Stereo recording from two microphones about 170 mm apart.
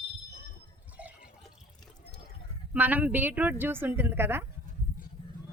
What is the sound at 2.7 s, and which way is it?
A woman's voice, 10° right (ahead or behind).